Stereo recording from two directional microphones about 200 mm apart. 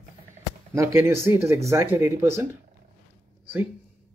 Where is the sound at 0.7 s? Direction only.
15° right (ahead or behind).